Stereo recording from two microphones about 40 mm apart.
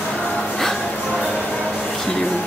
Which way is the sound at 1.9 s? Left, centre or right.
Centre.